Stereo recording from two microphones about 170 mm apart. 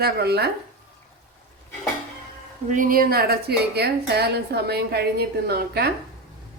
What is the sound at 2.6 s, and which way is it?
A woman's voice, 50° right (ahead or behind).